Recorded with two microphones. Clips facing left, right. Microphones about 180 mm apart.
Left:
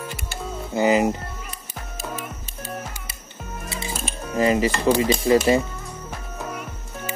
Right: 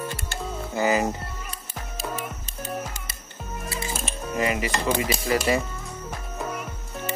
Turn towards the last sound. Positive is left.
turn(degrees=0)  # may be behind; listen again after turning